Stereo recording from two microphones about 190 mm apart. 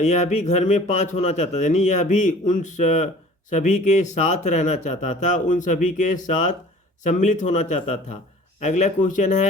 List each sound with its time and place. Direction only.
0.0 s speech: 35° left (ahead or behind)